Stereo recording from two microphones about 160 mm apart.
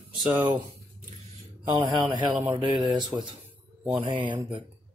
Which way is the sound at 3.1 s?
10° right (ahead or behind).